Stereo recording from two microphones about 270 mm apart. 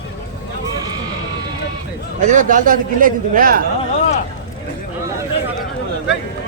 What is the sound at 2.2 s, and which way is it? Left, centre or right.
A man's voice, right.